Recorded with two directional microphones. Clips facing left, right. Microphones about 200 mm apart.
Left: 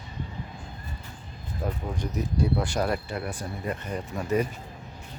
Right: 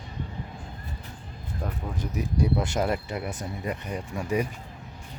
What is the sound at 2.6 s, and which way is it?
Speech, 20° right (ahead or behind).